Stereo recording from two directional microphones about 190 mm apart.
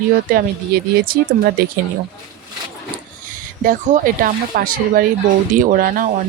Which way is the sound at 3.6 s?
45° right (ahead or behind).